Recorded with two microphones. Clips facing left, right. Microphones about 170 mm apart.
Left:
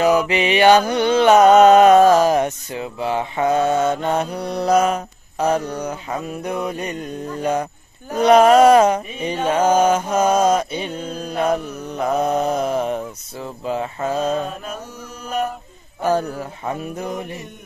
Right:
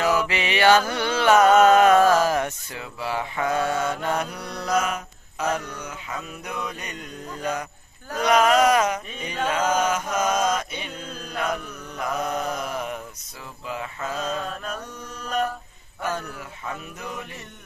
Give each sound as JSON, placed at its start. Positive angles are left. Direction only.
{"t": 0.0, "sound": "music", "side_deg": 20}
{"t": 8.2, "sound": "mantra", "side_deg": 30}
{"t": 14.4, "sound": "mantra", "side_deg": 10}
{"t": 16.0, "sound": "mantra", "side_deg": 35}